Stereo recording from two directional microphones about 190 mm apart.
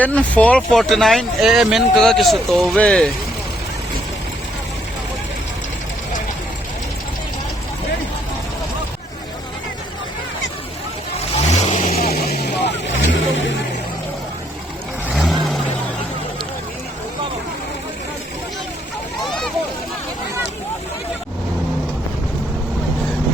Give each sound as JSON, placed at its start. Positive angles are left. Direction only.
{"t": 0.0, "sound": "speech", "side_deg": 5}
{"t": 11.5, "sound": "vehicle", "side_deg": 35}
{"t": 11.9, "sound": "vehicle", "side_deg": 55}
{"t": 15.1, "sound": "vehicle", "side_deg": 0}
{"t": 19.2, "sound": "a sound", "side_deg": 5}